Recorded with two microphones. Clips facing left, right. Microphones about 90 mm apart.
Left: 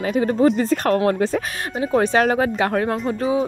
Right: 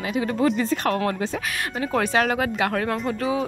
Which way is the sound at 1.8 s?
30° left (ahead or behind).